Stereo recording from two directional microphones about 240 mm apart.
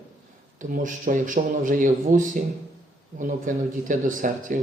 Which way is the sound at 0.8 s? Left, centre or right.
Right.